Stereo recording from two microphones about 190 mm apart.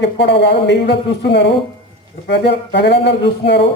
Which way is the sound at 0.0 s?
65° left (ahead or behind).